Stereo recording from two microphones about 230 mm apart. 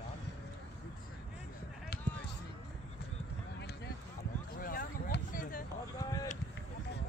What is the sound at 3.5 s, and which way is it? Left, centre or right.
Run, left.